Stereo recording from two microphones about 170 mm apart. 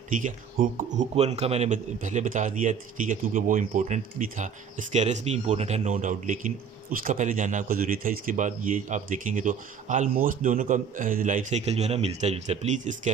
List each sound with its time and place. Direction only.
0.2 s speech: 50° right (ahead or behind)